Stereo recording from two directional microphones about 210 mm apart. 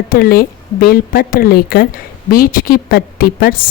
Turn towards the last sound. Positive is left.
turn(degrees=45)  # may be behind; listen again after turning